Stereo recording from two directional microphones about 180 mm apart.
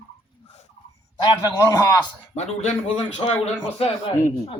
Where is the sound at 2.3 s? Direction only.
35° left (ahead or behind).